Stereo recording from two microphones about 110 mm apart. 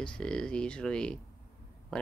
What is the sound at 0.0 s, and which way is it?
Speech, 10° left (ahead or behind).